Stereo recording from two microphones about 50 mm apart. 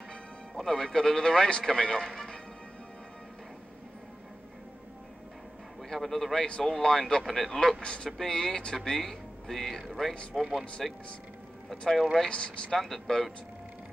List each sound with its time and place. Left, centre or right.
0.6 s a man's voice: centre
5.9 s a man's voice: centre
7.8 s a man's voice: centre
12.3 s speech: centre
12.7 s speech: centre